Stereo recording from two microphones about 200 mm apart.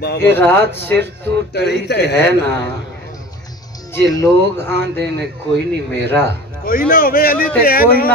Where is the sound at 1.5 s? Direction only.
55° left (ahead or behind).